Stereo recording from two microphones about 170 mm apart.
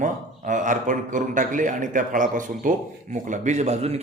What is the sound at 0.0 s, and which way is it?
A man's voice, 45° right (ahead or behind).